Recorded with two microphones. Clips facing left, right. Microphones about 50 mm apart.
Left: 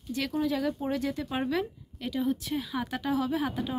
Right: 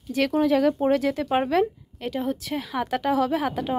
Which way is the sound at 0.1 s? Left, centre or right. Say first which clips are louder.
Right 8 dB; right.